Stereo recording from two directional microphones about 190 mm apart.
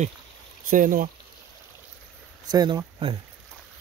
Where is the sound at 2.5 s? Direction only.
20° right (ahead or behind).